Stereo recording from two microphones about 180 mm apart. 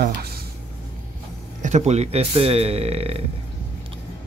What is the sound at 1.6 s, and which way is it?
Speech, 40° right (ahead or behind).